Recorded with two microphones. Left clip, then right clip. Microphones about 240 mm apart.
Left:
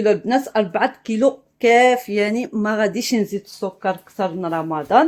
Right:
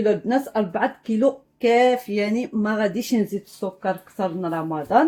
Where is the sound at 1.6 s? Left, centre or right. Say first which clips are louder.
Left 4 dB; left.